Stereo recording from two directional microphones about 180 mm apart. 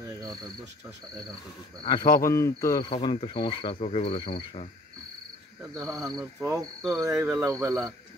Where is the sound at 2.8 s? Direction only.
30° left (ahead or behind).